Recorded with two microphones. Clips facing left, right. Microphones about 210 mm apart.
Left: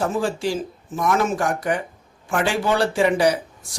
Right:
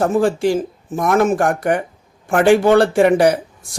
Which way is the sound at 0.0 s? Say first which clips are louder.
Right 7 dB; 55° right (ahead or behind).